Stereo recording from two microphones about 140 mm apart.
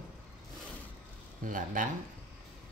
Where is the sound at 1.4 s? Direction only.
75° right (ahead or behind).